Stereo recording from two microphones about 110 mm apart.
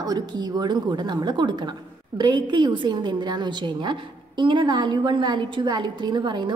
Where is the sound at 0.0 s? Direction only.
40° right (ahead or behind).